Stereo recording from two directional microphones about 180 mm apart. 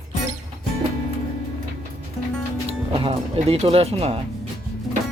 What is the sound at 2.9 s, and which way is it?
Music, 30° right (ahead or behind).